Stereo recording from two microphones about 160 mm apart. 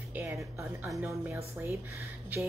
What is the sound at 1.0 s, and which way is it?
Speech, 15° right (ahead or behind).